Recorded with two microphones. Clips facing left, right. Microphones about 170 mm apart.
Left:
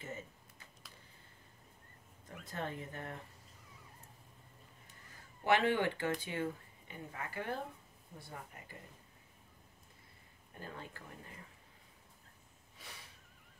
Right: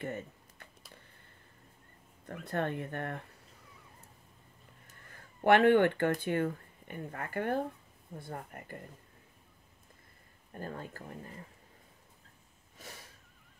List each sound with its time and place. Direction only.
0.0 s typing: 60° right (ahead or behind)
2.2 s speech: 60° right (ahead or behind)
5.1 s speech: 55° right (ahead or behind)
10.5 s speech: 45° right (ahead or behind)
12.7 s a sound: 45° right (ahead or behind)